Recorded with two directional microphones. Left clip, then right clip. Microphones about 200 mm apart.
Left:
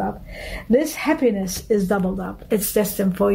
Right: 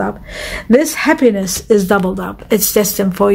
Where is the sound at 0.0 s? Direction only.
35° right (ahead or behind).